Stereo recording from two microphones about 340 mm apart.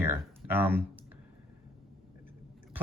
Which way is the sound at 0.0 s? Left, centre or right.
Centre.